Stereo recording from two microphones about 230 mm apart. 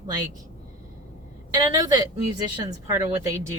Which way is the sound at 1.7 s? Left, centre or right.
Centre.